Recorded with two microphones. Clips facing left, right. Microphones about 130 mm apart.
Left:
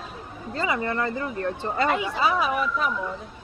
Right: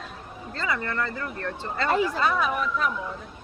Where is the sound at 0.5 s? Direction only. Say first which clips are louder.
Left 3 dB; 15° left (ahead or behind).